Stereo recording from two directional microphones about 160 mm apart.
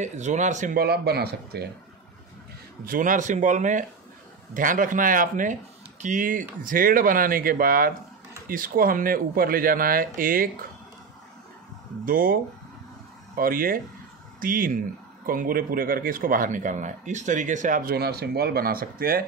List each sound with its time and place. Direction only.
0.0 s speech: 45° right (ahead or behind)
0.7 s speech: 80° right
2.8 s speech: 60° right (ahead or behind)
12.0 s speech: 60° right (ahead or behind)
13.4 s speech: 65° right (ahead or behind)